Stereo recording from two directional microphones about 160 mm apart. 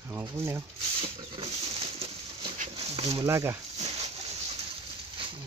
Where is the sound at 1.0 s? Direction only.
35° right (ahead or behind).